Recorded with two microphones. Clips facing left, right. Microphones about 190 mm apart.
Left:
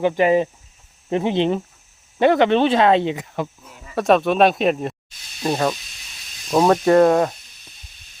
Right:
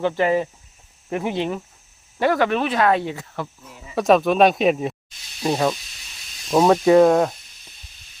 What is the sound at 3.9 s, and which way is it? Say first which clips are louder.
Speech: even; centre (ahead or behind).